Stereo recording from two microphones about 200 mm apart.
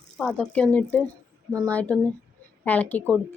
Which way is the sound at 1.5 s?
15° right (ahead or behind).